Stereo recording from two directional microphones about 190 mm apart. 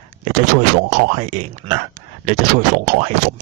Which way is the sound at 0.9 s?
40° right (ahead or behind).